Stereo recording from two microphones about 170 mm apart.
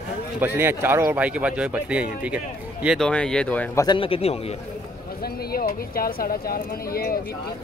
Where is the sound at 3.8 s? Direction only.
30° left (ahead or behind).